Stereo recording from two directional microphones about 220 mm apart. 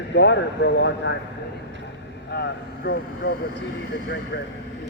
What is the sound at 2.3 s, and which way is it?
Speech, 50° left (ahead or behind).